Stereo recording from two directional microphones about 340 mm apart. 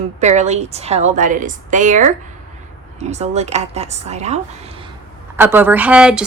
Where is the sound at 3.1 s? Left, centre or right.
Centre.